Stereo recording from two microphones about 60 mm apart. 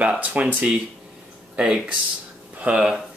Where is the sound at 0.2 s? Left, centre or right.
Right.